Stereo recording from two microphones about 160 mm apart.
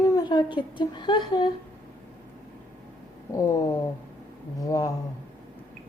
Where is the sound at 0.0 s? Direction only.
25° left (ahead or behind).